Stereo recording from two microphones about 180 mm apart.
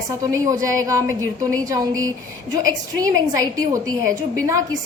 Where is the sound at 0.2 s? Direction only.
20° right (ahead or behind).